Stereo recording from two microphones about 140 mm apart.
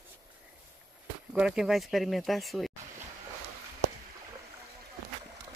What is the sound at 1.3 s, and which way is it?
Speech, 5° right (ahead or behind).